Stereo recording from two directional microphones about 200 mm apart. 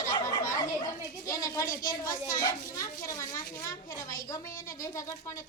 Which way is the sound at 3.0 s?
15° left (ahead or behind).